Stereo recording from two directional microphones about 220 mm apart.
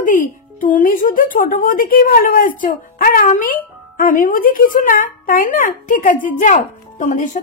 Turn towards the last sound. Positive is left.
turn(degrees=35)  # may be behind; listen again after turning